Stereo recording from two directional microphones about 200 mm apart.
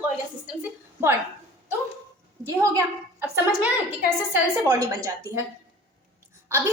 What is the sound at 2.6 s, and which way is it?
Speech, 15° right (ahead or behind).